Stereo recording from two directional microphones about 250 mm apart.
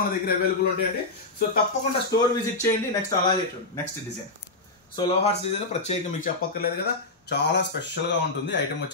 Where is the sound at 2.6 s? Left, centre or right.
Centre.